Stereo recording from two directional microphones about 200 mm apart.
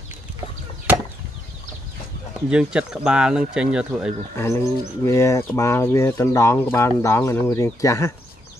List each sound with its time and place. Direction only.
2.5 s speech: 5° right (ahead or behind)
4.4 s speech: 15° left (ahead or behind)